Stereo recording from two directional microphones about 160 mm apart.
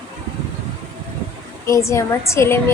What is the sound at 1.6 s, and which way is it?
Speech, 20° left (ahead or behind).